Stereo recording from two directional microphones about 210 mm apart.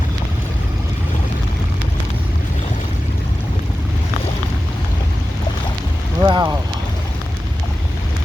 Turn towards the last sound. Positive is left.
turn(degrees=-20)  # may be behind; listen again after turning